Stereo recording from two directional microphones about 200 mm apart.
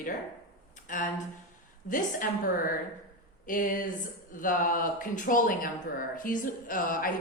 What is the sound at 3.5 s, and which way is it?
Speech, 45° left (ahead or behind).